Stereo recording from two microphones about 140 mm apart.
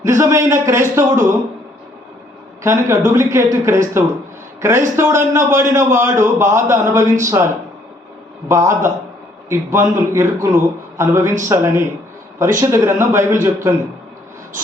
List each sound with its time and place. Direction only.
0.0 s a man's voice: 20° right (ahead or behind)
2.6 s a man's voice: 20° right (ahead or behind)